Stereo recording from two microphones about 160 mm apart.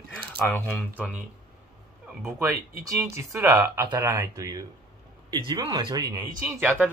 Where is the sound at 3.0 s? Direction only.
15° right (ahead or behind).